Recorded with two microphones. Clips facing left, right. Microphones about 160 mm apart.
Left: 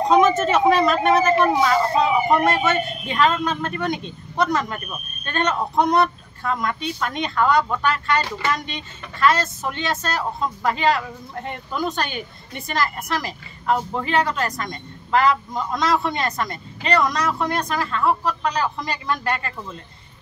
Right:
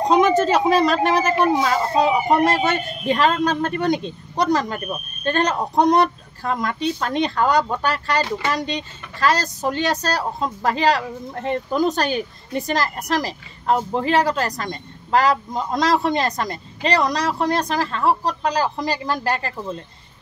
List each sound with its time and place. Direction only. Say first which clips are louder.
0.1 s speech: right 1 dB; 30° right (ahead or behind)